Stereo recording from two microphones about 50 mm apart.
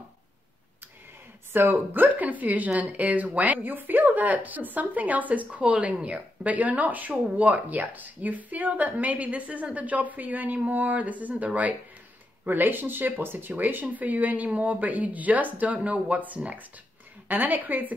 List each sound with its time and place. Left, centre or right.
1.5 s speech: right
2.1 s speech: right